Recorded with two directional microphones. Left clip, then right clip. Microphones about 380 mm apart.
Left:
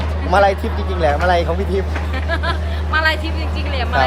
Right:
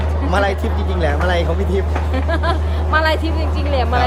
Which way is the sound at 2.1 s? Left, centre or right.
Right.